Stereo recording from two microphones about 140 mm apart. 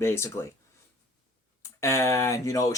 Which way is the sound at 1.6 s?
20° left (ahead or behind).